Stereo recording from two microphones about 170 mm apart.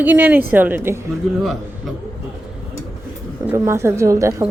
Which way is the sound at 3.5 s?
15° right (ahead or behind).